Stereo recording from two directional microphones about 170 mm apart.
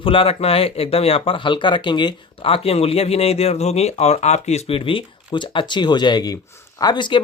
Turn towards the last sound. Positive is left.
turn(degrees=25)  # may be behind; listen again after turning